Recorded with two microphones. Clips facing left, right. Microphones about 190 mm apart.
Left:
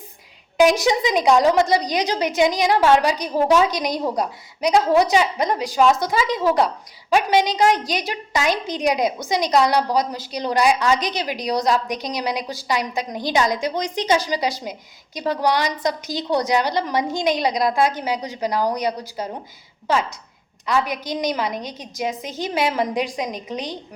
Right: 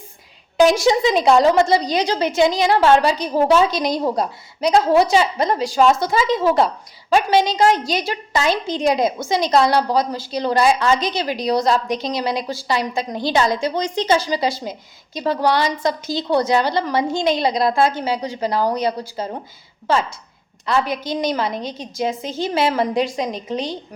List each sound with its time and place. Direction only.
0.6 s a woman's voice: 15° left (ahead or behind)